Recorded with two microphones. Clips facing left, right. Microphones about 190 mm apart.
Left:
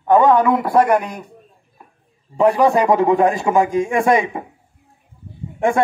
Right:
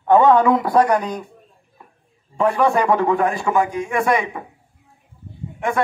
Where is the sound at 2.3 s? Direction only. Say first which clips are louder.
Left 3 dB; 15° left (ahead or behind).